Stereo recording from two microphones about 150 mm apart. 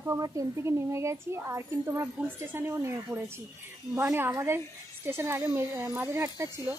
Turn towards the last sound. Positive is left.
turn(degrees=-15)  # may be behind; listen again after turning